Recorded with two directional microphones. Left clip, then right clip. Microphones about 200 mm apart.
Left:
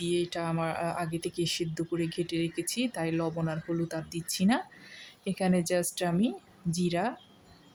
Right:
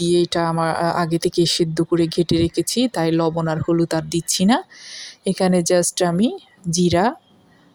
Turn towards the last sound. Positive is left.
turn(degrees=-35)  # may be behind; listen again after turning